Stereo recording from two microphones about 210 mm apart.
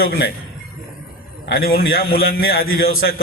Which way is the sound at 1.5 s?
45° left (ahead or behind).